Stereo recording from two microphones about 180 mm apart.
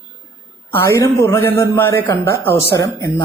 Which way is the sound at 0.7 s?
15° left (ahead or behind).